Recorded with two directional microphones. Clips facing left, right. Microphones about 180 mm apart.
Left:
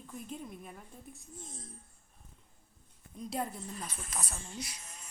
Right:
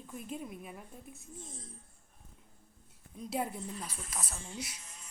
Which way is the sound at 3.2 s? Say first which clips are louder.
Right 1 dB; 5° right (ahead or behind).